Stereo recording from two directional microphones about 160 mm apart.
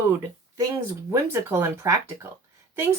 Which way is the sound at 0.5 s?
20° right (ahead or behind).